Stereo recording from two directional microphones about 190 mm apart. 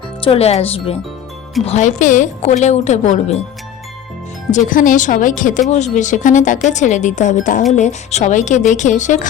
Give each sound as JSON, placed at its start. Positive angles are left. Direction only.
{"t": 0.2, "sound": "a woman's voice", "side_deg": 30}
{"t": 4.5, "sound": "a woman's voice", "side_deg": 45}